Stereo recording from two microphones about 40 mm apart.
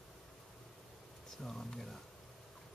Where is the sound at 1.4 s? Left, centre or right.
Centre.